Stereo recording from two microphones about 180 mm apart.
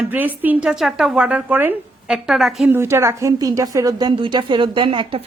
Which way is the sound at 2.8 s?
15° right (ahead or behind).